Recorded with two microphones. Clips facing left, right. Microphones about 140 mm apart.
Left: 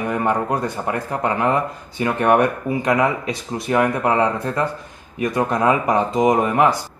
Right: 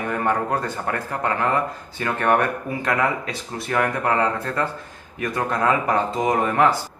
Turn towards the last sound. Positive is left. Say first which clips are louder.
# left 3 dB
turn(degrees=15)  # may be behind; listen again after turning